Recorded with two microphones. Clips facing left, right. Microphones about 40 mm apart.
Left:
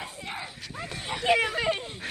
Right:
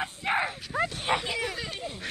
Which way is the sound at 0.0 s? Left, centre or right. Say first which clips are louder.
Right 9 dB; right.